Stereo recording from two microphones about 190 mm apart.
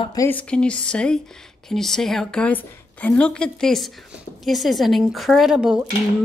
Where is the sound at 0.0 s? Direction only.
20° left (ahead or behind).